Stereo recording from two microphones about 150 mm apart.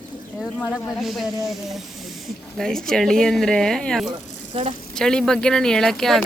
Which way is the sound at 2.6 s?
5° left (ahead or behind).